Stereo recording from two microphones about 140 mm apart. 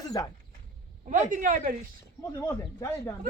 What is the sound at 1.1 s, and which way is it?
Speech, 70° right (ahead or behind).